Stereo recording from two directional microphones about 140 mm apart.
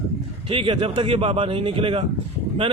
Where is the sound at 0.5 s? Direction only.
40° right (ahead or behind).